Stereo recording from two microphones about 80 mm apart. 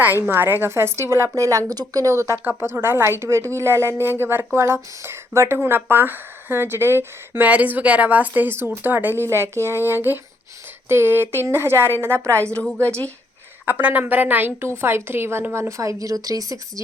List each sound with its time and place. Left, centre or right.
0.3 s a woman's voice: right
13.7 s a woman's voice: right